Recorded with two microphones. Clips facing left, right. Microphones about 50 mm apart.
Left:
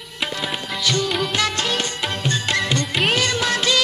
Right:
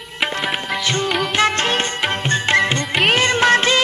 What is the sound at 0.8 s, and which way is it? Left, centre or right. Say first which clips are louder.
Music: even; right.